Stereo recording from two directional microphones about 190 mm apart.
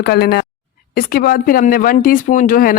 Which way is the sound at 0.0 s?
55° left (ahead or behind).